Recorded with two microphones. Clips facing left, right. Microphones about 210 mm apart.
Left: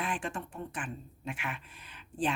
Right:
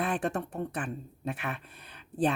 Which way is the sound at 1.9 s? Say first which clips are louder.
Right 5 dB; 60° right (ahead or behind).